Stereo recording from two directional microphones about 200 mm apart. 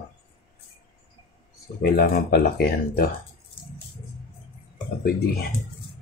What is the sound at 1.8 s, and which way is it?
Speech, 50° left (ahead or behind).